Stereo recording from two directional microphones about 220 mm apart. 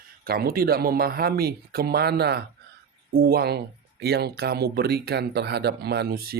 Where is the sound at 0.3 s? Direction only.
45° right (ahead or behind).